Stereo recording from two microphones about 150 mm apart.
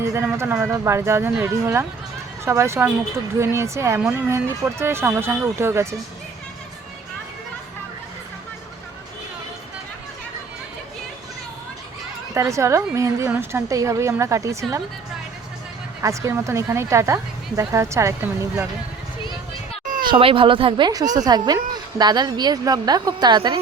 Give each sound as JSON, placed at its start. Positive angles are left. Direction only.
{"t": 0.0, "sound": "a sound", "side_deg": -20}
{"t": 0.3, "sound": "speech", "side_deg": -15}
{"t": 12.3, "sound": "speech", "side_deg": -20}
{"t": 16.0, "sound": "speech", "side_deg": -20}
{"t": 20.1, "sound": "speech", "side_deg": -35}